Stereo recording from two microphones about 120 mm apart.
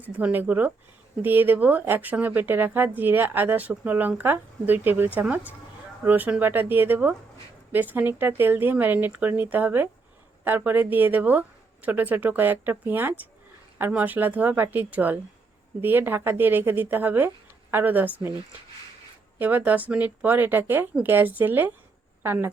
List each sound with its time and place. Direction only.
0.0 s speech: 15° right (ahead or behind)
19.4 s speech: 15° right (ahead or behind)